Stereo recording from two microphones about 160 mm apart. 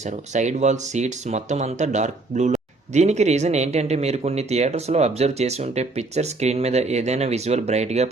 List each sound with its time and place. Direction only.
0.0 s speech: 45° right (ahead or behind)